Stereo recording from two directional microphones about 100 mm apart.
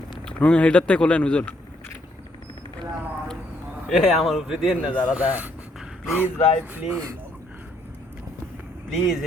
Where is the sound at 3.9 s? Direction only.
5° right (ahead or behind).